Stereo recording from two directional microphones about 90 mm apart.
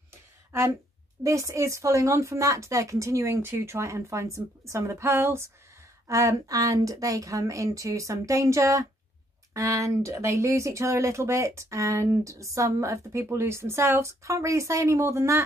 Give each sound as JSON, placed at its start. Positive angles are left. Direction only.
{"t": 0.5, "sound": "speech", "side_deg": -30}